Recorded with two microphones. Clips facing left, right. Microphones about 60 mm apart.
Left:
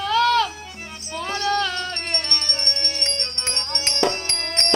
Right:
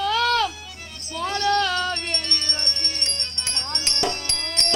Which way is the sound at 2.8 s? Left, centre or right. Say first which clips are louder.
Left 3 dB; left.